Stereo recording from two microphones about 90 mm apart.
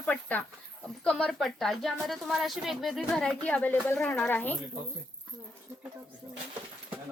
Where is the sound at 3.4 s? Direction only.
15° left (ahead or behind).